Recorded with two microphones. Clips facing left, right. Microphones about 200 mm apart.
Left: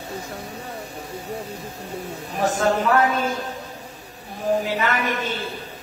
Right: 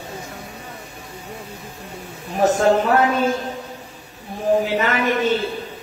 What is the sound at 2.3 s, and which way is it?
A man's voice, 40° right (ahead or behind).